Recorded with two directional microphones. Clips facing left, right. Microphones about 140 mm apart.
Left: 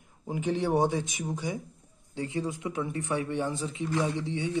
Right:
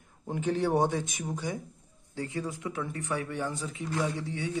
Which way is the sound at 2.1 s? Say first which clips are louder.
Left 2 dB; 20° left (ahead or behind).